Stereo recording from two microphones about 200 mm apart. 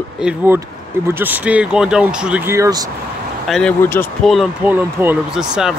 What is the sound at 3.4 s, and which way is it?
Speech, 5° left (ahead or behind).